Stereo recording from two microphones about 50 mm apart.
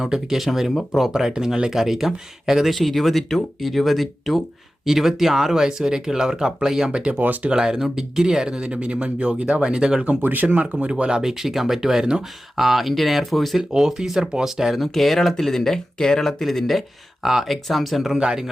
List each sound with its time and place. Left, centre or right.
0.0 s speech: centre
6.9 s speech: right
7.2 s speech: right
7.5 s speech: centre
10.1 s speech: right; by 13.6 s centre
13.6 s speech: centre
14.8 s speech: centre
18.2 s speech: centre